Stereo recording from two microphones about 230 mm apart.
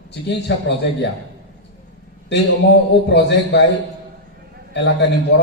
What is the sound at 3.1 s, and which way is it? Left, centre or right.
Speech, left.